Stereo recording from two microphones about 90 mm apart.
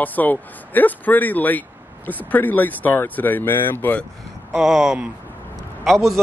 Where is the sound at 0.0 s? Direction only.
20° left (ahead or behind).